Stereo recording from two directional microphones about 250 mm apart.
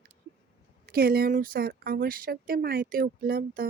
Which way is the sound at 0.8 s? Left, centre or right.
Right.